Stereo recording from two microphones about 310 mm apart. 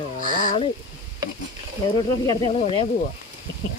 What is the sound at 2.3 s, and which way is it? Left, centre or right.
Speech, centre.